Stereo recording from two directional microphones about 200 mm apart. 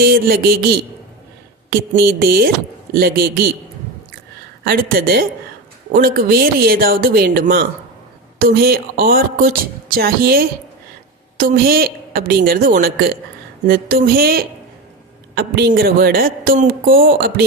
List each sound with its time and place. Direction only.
0.0 s speech: 50° right (ahead or behind)
1.9 s speech: 50° right (ahead or behind)
4.6 s speech: 50° right (ahead or behind)